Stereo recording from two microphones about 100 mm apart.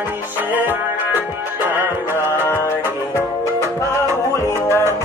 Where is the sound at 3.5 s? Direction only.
25° right (ahead or behind).